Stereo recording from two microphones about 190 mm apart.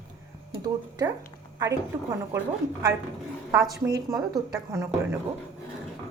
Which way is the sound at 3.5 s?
Centre (ahead or behind).